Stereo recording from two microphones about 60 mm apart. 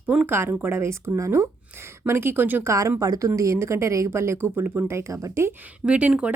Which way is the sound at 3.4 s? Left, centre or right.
Right.